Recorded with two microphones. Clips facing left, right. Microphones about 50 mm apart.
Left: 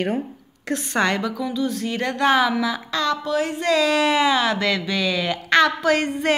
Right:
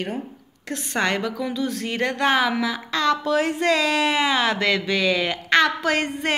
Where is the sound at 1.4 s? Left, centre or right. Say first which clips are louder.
Left 1 dB; right.